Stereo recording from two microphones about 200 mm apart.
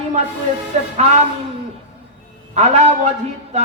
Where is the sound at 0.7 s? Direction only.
35° right (ahead or behind).